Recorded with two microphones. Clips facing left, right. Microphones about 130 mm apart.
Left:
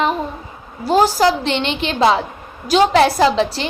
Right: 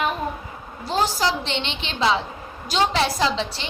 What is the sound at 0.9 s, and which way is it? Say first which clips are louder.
A woman's voice: left 8 dB; 60° left (ahead or behind).